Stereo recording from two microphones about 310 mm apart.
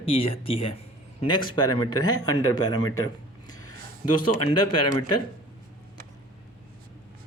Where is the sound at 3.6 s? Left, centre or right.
Left.